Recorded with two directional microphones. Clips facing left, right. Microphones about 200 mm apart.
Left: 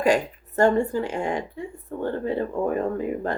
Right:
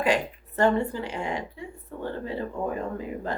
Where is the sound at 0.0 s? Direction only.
45° left (ahead or behind).